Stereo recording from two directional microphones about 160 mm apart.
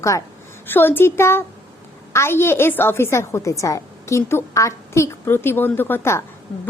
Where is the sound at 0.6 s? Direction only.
15° left (ahead or behind).